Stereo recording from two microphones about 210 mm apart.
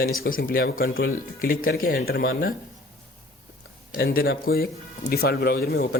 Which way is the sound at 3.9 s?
45° left (ahead or behind).